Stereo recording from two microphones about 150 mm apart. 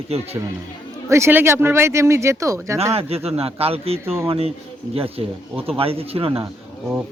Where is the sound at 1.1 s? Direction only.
15° right (ahead or behind).